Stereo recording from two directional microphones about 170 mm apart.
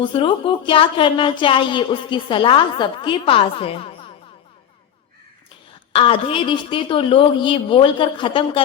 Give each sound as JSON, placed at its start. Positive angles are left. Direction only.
{"t": 0.0, "sound": "a woman's voice", "side_deg": 30}
{"t": 5.9, "sound": "a woman's voice", "side_deg": 35}